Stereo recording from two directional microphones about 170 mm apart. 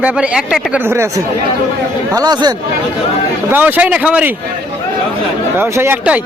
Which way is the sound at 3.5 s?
10° right (ahead or behind).